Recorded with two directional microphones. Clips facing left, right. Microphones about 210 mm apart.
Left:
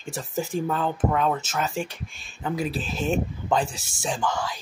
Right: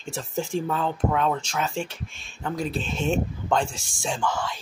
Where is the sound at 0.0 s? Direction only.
Centre (ahead or behind).